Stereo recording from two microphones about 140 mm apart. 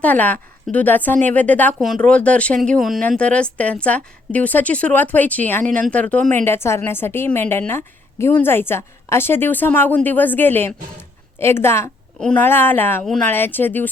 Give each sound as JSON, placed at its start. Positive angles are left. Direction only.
{"t": 0.0, "sound": "a woman's voice", "side_deg": 10}